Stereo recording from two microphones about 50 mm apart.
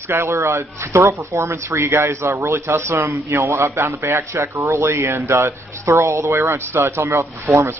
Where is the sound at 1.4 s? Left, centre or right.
Right.